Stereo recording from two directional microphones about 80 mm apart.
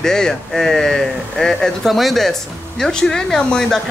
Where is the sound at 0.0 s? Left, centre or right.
Centre.